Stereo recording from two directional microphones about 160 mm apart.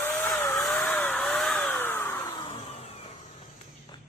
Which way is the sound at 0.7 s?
Centre (ahead or behind).